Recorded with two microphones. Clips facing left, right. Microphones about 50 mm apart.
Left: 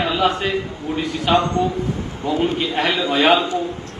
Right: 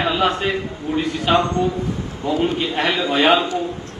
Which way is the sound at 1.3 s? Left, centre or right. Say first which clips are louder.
Left 1 dB; right.